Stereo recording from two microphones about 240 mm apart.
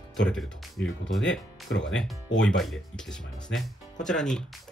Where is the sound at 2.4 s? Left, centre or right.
Centre.